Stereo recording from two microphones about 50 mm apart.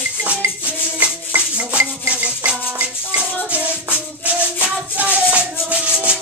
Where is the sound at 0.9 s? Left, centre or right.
Right.